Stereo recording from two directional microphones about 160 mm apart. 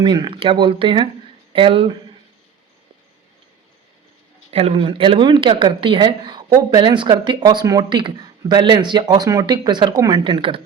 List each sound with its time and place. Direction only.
0.0 s speech: 30° right (ahead or behind)
4.5 s speech: 40° right (ahead or behind)